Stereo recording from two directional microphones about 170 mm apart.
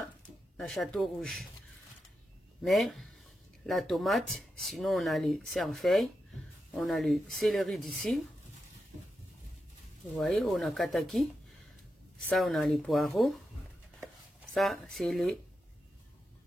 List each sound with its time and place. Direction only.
0.6 s speech: 5° left (ahead or behind)
2.6 s speech: centre (ahead or behind)
10.1 s speech: centre (ahead or behind)
12.3 s speech: centre (ahead or behind)
14.0 s a sound: centre (ahead or behind)